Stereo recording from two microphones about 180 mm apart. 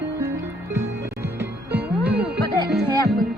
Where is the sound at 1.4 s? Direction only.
10° right (ahead or behind).